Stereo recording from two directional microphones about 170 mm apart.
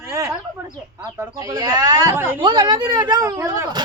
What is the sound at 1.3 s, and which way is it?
Speech, 20° right (ahead or behind).